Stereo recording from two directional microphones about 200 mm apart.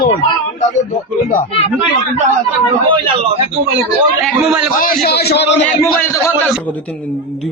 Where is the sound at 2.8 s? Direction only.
25° right (ahead or behind).